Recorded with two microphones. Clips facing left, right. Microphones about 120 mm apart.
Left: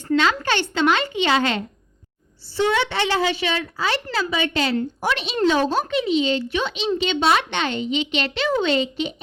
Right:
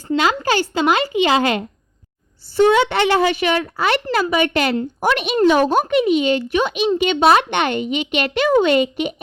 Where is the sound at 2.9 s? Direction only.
55° right (ahead or behind).